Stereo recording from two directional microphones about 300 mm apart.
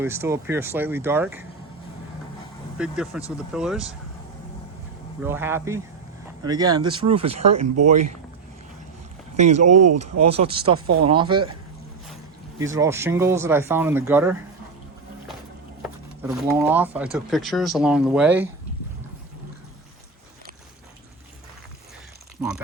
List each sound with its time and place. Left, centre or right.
0.0 s speech: centre
2.7 s speech: centre
5.2 s speech: centre
9.3 s speech: right
9.7 s speech: right
10.3 s speech: centre
10.8 s speech: right
11.1 s speech: centre
12.5 s speech: centre
15.8 s speech: centre